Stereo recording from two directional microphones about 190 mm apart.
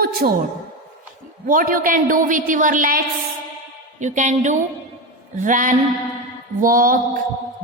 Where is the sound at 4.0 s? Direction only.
40° right (ahead or behind).